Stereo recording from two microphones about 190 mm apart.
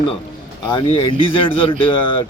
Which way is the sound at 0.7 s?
25° left (ahead or behind).